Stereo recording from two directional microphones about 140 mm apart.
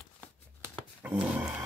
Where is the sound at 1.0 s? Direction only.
15° right (ahead or behind).